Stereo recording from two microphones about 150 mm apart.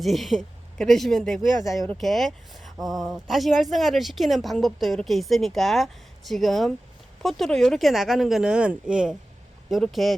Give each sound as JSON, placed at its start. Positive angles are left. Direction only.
{"t": 0.0, "sound": "speech", "side_deg": 0}